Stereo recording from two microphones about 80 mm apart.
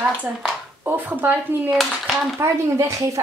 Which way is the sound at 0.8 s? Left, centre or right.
Right.